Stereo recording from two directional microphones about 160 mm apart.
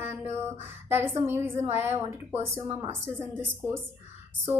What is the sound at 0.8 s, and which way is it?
A woman's voice, 15° right (ahead or behind).